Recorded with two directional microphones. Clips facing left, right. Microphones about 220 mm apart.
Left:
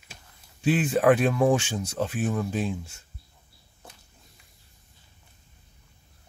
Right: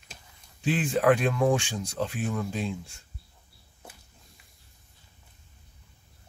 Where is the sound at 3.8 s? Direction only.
5° right (ahead or behind).